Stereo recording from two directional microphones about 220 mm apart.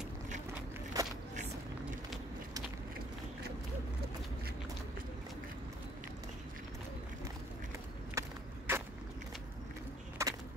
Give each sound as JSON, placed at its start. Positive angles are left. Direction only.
{"t": 1.0, "sound": "walk", "side_deg": -15}
{"t": 8.1, "sound": "skateboard", "side_deg": -10}
{"t": 10.2, "sound": "music", "side_deg": -15}